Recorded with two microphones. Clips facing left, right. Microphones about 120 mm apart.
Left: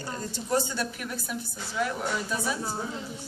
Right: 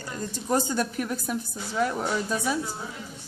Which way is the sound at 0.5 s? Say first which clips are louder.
Right 3 dB; 40° right (ahead or behind).